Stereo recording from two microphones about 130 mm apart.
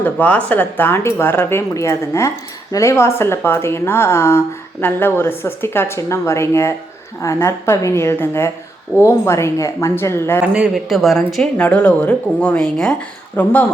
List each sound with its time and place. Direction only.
0.0 s a woman's voice: 10° left (ahead or behind)
10.4 s speech: 10° right (ahead or behind); by 13.7 s 10° left (ahead or behind)